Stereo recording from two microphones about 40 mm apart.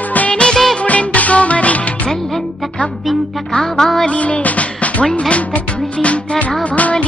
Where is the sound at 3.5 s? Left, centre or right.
Centre.